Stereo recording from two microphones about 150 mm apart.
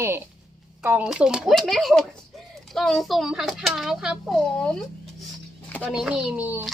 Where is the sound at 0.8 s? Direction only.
10° right (ahead or behind).